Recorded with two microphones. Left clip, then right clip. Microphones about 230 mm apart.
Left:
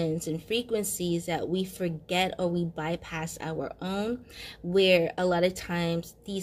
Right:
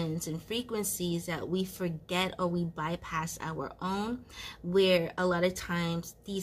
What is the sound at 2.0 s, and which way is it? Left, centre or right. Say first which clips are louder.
Speech: left 4 dB; right.